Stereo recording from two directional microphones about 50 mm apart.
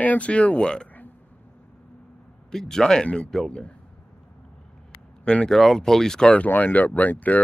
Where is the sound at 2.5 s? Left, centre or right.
Centre.